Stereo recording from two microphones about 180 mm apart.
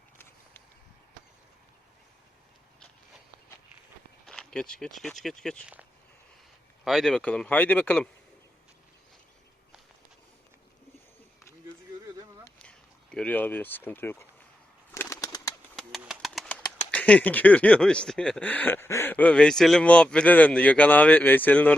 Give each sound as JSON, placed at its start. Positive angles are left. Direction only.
{"t": 4.3, "sound": "speech", "side_deg": 5}
{"t": 6.8, "sound": "speech", "side_deg": 0}
{"t": 12.5, "sound": "speech", "side_deg": 5}
{"t": 14.9, "sound": "bird", "side_deg": 15}
{"t": 15.7, "sound": "bird", "side_deg": 5}
{"t": 16.9, "sound": "speech", "side_deg": 10}